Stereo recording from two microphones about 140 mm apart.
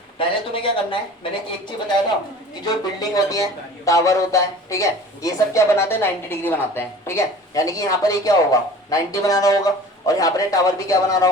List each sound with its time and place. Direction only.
0.2 s speech: 40° left (ahead or behind)
3.0 s speech: 25° left (ahead or behind)